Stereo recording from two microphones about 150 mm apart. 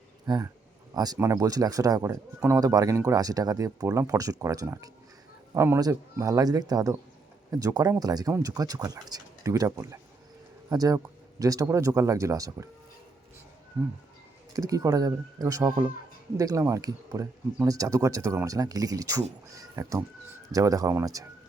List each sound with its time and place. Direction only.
0.3 s speech: 25° right (ahead or behind)
14.5 s speech: 20° right (ahead or behind)